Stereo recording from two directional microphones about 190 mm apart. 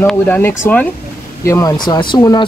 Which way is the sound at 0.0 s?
10° left (ahead or behind).